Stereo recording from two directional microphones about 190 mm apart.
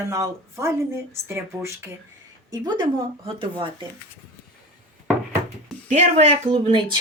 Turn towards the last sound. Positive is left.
turn(degrees=-30)  # may be behind; listen again after turning